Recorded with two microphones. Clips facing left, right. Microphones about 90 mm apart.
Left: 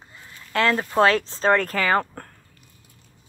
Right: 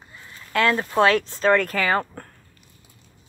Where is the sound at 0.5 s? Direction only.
35° left (ahead or behind).